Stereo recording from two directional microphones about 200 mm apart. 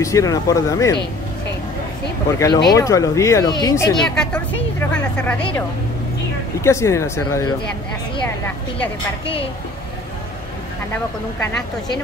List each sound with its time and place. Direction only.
0.0 s speech: 15° left (ahead or behind)
2.3 s speech: 15° left (ahead or behind)
4.0 s speech: 5° left (ahead or behind)
6.6 s speech: 15° left (ahead or behind)